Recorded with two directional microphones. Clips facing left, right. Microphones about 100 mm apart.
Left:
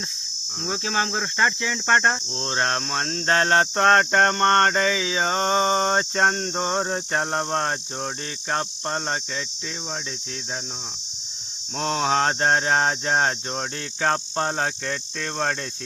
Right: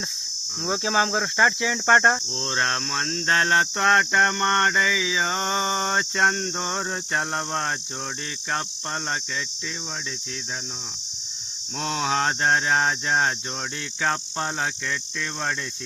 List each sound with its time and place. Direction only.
0.7 s cricket: 10° right (ahead or behind)
2.5 s cricket: 30° left (ahead or behind)
11.8 s cricket: 35° left (ahead or behind)
14.0 s speech: 40° left (ahead or behind)